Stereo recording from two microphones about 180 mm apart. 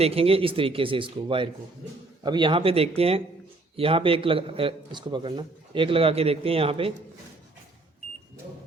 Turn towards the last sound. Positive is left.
turn(degrees=-30)  # may be behind; listen again after turning